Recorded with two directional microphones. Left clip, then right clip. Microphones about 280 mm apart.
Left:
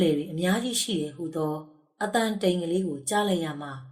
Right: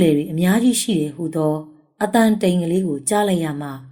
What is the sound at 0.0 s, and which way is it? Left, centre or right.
Speech, right.